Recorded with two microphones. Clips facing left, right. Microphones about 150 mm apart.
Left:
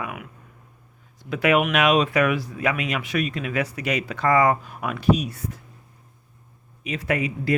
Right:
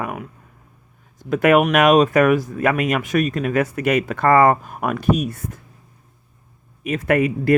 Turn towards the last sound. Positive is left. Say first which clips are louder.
# right 7 dB
turn(degrees=-55)  # may be behind; listen again after turning